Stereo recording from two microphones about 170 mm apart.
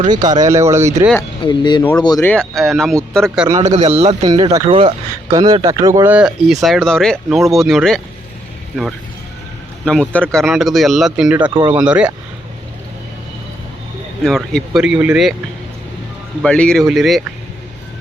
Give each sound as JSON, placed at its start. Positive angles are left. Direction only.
{"t": 0.0, "sound": "speech", "side_deg": -25}
{"t": 1.5, "sound": "speech", "side_deg": 25}
{"t": 1.8, "sound": "speech", "side_deg": 10}
{"t": 3.6, "sound": "speech", "side_deg": -40}
{"t": 9.8, "sound": "speech", "side_deg": 5}
{"t": 11.3, "sound": "speech", "side_deg": -25}
{"t": 11.7, "sound": "speech", "side_deg": -5}
{"t": 14.3, "sound": "speech", "side_deg": 0}
{"t": 16.4, "sound": "speech", "side_deg": 5}